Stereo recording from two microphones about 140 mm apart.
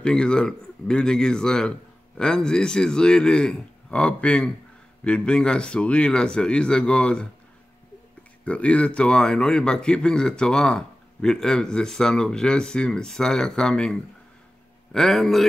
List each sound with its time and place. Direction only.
0.0 s speech: 5° left (ahead or behind)
8.5 s speech: 10° left (ahead or behind)